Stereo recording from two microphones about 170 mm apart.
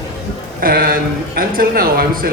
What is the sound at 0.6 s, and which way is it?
A man's voice, 55° right (ahead or behind).